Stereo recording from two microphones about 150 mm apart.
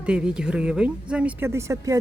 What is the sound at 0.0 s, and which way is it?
Speech, 5° right (ahead or behind).